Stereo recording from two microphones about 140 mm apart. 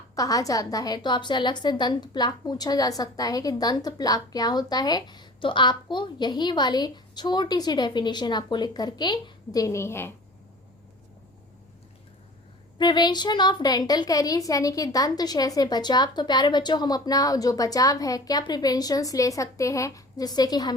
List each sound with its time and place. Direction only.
0.2 s a woman's voice: 25° left (ahead or behind)
12.8 s a woman's voice: 30° left (ahead or behind)